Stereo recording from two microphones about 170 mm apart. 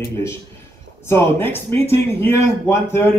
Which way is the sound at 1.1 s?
10° left (ahead or behind).